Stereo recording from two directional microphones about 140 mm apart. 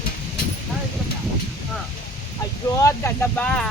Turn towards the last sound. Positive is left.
turn(degrees=10)  # may be behind; listen again after turning